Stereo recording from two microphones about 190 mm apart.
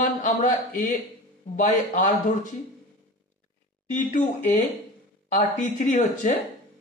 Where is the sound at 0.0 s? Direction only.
45° left (ahead or behind).